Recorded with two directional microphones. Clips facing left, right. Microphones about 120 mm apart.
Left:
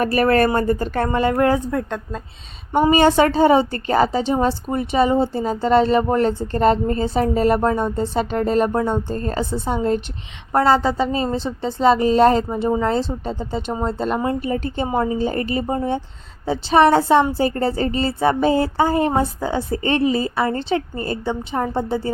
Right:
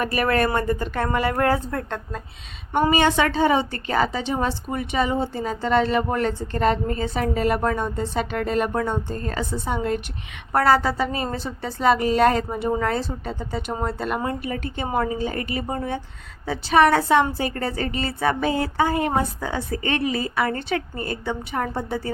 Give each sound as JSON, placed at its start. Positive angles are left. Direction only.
{"t": 0.0, "sound": "a woman's voice", "side_deg": 35}
{"t": 2.9, "sound": "a woman's voice", "side_deg": 40}